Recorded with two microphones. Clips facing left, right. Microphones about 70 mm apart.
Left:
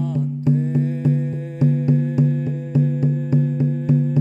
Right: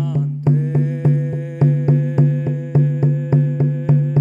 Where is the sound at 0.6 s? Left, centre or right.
Right.